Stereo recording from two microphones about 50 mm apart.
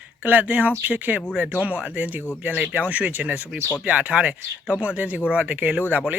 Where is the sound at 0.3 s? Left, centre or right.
Right.